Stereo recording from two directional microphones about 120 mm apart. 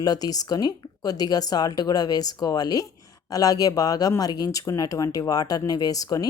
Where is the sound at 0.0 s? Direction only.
35° left (ahead or behind).